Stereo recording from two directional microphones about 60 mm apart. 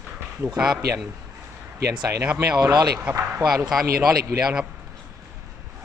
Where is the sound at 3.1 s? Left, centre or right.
Right.